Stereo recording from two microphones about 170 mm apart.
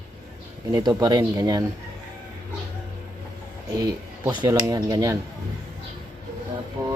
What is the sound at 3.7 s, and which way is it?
Speech, 20° right (ahead or behind).